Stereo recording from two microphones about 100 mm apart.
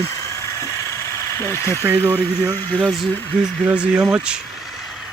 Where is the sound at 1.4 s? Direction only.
25° left (ahead or behind).